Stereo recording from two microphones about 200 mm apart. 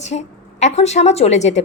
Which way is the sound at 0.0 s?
35° left (ahead or behind).